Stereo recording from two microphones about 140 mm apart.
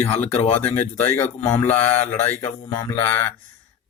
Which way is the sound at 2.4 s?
25° left (ahead or behind).